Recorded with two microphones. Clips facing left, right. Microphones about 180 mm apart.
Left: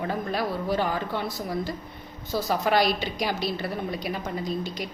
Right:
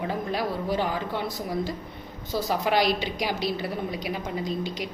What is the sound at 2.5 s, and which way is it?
A woman's voice, 10° right (ahead or behind).